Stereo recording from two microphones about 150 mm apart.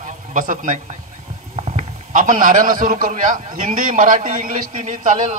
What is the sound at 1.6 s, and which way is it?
A man's voice, 45° right (ahead or behind).